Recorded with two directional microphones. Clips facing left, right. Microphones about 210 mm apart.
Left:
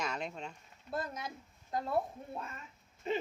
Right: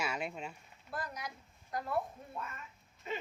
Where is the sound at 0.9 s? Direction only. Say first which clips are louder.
Left 3 dB; 25° left (ahead or behind).